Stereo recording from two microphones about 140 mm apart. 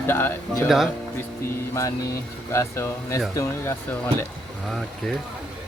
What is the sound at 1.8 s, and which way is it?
Speech, 25° left (ahead or behind).